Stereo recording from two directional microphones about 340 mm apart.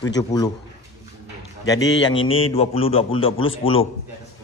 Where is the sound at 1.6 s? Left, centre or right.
Centre.